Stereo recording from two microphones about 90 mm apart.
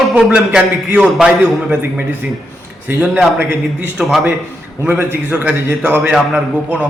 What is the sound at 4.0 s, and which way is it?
Speech, centre (ahead or behind).